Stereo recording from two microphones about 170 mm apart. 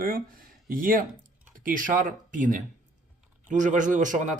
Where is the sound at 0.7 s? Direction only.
55° right (ahead or behind).